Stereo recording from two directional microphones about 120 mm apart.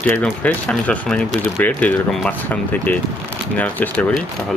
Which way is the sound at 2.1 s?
Centre (ahead or behind).